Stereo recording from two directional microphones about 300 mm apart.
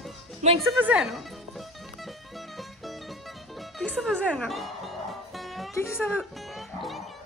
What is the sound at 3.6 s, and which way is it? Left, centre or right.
Music, centre.